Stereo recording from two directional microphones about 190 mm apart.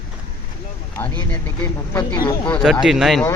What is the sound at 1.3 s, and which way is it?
Speech, 20° left (ahead or behind).